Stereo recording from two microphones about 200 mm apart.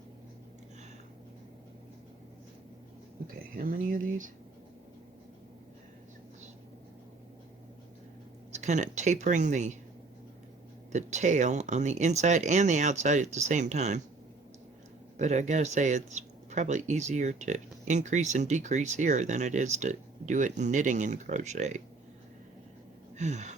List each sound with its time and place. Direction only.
3.5 s speech: 45° right (ahead or behind)
8.5 s speech: 35° right (ahead or behind)
10.9 s speech: 35° right (ahead or behind)
15.2 s speech: 35° right (ahead or behind)
23.1 s a sound: 35° right (ahead or behind)